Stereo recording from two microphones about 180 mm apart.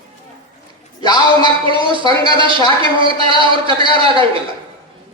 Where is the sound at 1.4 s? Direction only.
30° right (ahead or behind).